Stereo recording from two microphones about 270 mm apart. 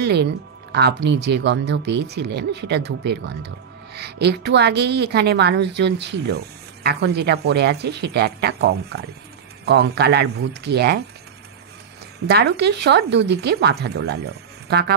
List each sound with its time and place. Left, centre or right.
0.0 s speech: right
12.3 s speech: right